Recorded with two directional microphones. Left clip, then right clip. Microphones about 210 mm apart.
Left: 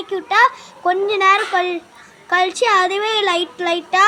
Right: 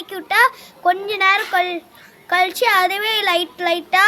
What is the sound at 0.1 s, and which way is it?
Speech, 55° right (ahead or behind).